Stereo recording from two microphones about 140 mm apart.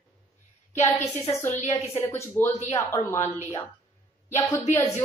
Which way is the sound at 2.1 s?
15° left (ahead or behind).